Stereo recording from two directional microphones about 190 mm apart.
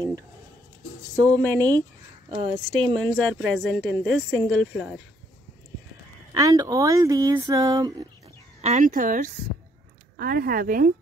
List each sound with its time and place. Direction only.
1.1 s speech: 20° right (ahead or behind)
3.3 s a woman's voice: centre (ahead or behind)
6.3 s speech: 20° right (ahead or behind)
8.5 s speech: 35° right (ahead or behind)